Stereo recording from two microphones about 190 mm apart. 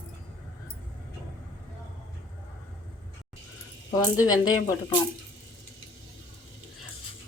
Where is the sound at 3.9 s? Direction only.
20° left (ahead or behind).